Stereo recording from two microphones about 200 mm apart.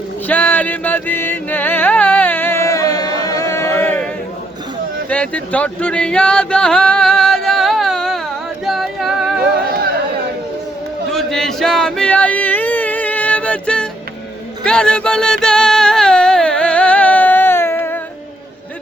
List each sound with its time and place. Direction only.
0.3 s music: 10° left (ahead or behind)
3.2 s chant: 15° left (ahead or behind)
5.0 s a sound: 5° left (ahead or behind)
9.4 s music: 55° right (ahead or behind)
11.1 s a sound: centre (ahead or behind)
14.6 s music: 5° left (ahead or behind)